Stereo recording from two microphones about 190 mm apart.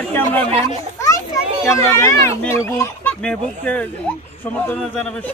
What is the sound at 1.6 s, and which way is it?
Speech, 15° left (ahead or behind).